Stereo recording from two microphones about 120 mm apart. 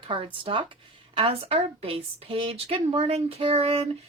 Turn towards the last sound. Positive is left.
turn(degrees=-55)  # may be behind; listen again after turning